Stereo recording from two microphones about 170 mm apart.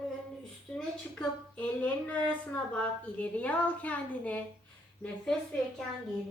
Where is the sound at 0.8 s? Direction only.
5° left (ahead or behind).